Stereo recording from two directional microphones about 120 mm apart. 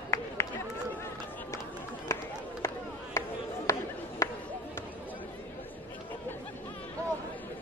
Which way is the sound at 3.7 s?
25° left (ahead or behind).